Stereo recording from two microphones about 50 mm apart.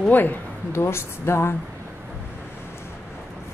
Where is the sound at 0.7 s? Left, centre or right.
Left.